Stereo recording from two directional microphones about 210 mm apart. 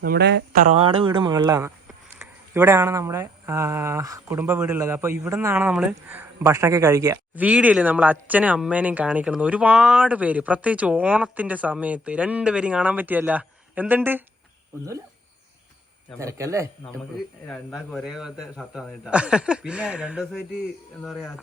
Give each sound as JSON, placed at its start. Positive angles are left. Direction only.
{"t": 0.0, "sound": "speech", "side_deg": -50}
{"t": 0.6, "sound": "speech", "side_deg": -30}
{"t": 16.1, "sound": "speech", "side_deg": -15}
{"t": 17.5, "sound": "a man's voice", "side_deg": 0}